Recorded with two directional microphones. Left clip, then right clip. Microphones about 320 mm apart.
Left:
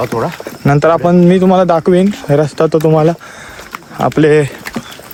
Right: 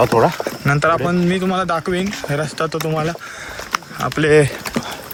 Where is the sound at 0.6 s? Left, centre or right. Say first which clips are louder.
Left 7 dB; centre.